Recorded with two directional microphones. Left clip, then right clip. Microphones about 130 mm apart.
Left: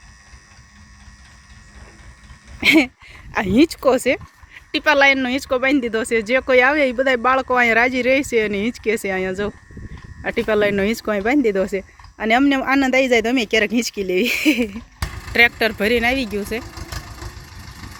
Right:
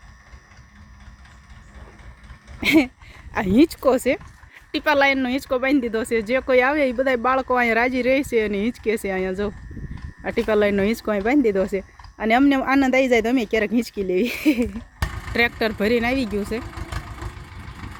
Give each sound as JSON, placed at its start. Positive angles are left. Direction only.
{"t": 2.6, "sound": "speech", "side_deg": 0}